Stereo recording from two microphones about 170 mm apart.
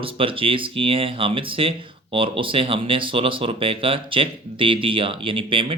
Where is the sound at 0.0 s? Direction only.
30° right (ahead or behind).